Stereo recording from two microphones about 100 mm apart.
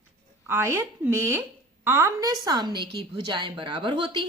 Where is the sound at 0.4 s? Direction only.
25° right (ahead or behind).